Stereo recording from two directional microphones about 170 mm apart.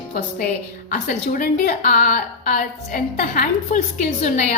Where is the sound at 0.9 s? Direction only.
50° left (ahead or behind).